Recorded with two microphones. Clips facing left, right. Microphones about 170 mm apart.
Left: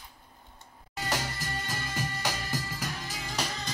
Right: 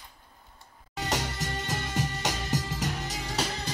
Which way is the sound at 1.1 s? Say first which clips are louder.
Right 2 dB; 75° right (ahead or behind).